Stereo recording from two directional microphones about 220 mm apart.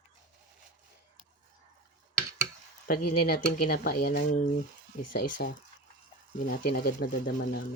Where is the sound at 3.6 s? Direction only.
40° left (ahead or behind).